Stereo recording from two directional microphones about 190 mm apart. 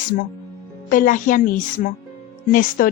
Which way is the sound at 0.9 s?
45° left (ahead or behind).